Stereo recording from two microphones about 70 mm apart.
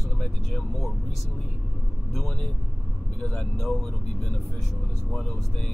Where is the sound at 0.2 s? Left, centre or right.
Centre.